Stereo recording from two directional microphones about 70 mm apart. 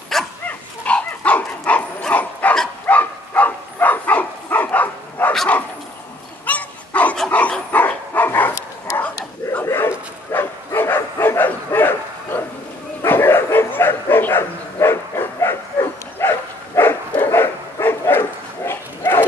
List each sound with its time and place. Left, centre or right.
0.1 s dog: centre
0.5 s dog: centre
6.4 s dog: left
9.7 s bow-wow: left
17.3 s dog: left